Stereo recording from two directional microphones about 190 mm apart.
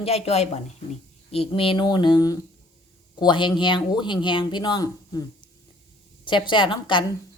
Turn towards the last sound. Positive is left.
turn(degrees=25)  # may be behind; listen again after turning